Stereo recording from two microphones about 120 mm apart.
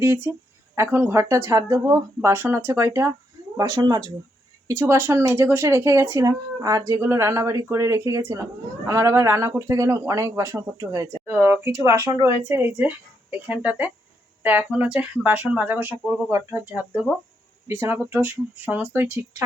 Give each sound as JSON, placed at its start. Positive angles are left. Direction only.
{"t": 0.0, "sound": "speech", "side_deg": -20}
{"t": 3.6, "sound": "speech", "side_deg": -35}
{"t": 4.7, "sound": "speech", "side_deg": -25}